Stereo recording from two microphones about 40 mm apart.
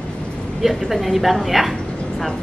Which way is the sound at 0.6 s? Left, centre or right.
Centre.